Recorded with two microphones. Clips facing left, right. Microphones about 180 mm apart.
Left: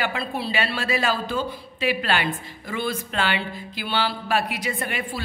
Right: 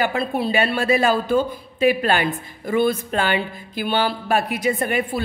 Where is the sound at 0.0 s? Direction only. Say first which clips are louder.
Right 6 dB; 45° right (ahead or behind).